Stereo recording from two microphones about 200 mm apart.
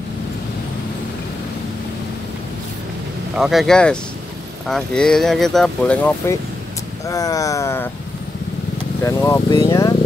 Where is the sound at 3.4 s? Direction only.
Centre (ahead or behind).